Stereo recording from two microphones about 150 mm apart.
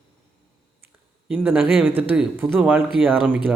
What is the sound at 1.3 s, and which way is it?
Speech, 10° right (ahead or behind).